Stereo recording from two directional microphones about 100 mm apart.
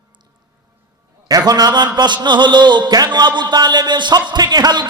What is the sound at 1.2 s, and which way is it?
Mantra, 40° right (ahead or behind).